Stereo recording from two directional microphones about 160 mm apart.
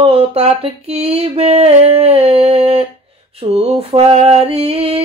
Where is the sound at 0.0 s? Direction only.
40° right (ahead or behind).